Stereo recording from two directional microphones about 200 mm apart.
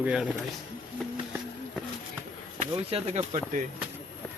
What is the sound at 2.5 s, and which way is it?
Speech, 30° right (ahead or behind).